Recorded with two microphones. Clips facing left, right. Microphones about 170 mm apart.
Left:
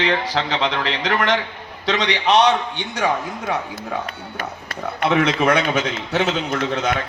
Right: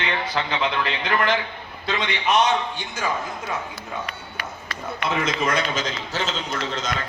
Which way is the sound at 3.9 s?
80° left.